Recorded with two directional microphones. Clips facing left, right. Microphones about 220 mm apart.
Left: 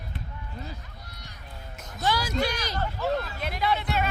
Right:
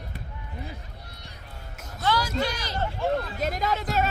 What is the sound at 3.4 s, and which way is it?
Speech, 45° right (ahead or behind).